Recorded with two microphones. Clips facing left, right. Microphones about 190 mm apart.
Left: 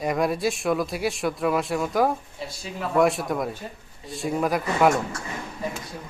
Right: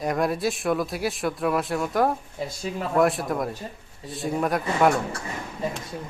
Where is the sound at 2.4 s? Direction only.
50° right (ahead or behind).